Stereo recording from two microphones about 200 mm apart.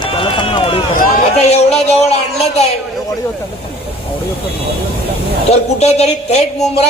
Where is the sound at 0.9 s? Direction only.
35° left (ahead or behind).